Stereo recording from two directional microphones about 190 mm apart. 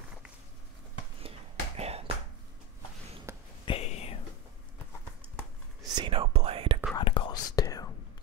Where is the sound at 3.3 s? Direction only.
15° right (ahead or behind).